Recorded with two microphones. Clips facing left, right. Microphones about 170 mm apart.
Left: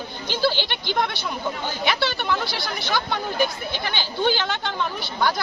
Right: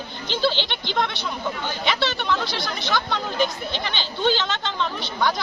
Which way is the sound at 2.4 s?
20° right (ahead or behind).